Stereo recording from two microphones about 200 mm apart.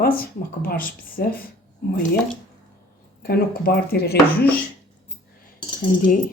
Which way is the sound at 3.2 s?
50° left (ahead or behind).